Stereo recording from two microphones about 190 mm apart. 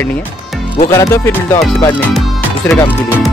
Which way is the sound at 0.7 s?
25° left (ahead or behind).